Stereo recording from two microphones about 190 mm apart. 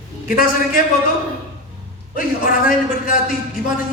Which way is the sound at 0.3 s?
45° left (ahead or behind).